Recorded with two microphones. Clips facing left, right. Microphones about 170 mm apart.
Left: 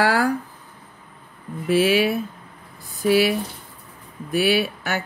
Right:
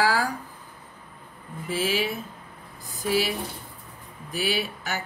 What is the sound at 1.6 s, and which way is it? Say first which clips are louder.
Speech: left 9 dB; 65° left (ahead or behind).